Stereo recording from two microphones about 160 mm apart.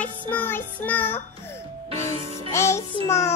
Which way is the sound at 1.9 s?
35° right (ahead or behind).